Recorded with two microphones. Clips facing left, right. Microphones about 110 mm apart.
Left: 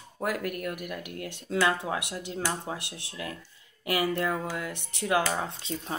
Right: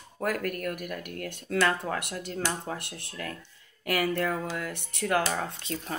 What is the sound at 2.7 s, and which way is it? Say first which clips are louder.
Speech: even; 50° right (ahead or behind).